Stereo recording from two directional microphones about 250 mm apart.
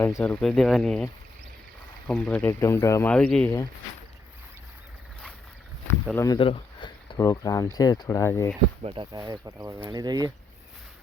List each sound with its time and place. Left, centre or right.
0.0 s speech: centre
6.1 s speech: centre
8.8 s speech: right